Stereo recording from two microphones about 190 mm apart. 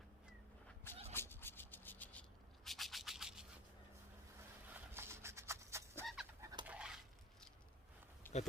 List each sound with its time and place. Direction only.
1.1 s rub: 10° left (ahead or behind)
4.7 s fowl: 15° right (ahead or behind)
6.4 s chicken: 20° right (ahead or behind)
6.7 s a sound: 5° right (ahead or behind)
8.2 s livestock: 10° left (ahead or behind)